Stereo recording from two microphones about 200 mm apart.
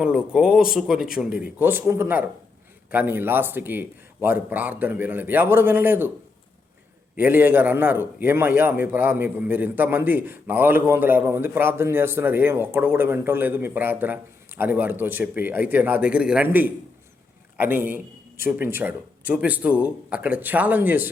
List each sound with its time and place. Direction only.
0.0 s a man's voice: 5° right (ahead or behind)
7.2 s a man's voice: 10° right (ahead or behind)